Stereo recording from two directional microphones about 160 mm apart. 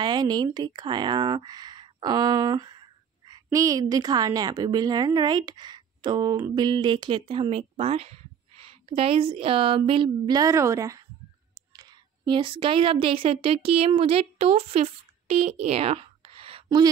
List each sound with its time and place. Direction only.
0.0 s a woman's voice: 25° right (ahead or behind)
16.6 s speech: 25° right (ahead or behind)